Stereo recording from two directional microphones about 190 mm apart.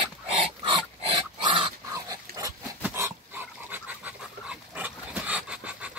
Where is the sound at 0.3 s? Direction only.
25° right (ahead or behind).